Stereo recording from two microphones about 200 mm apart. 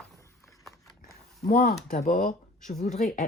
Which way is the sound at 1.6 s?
35° left (ahead or behind).